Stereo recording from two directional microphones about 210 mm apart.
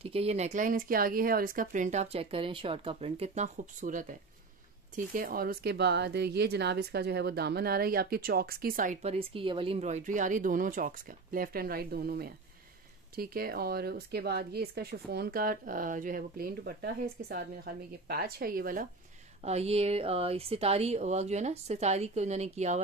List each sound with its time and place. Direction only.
0.0 s speech: 30° right (ahead or behind)
19.4 s speech: 30° right (ahead or behind)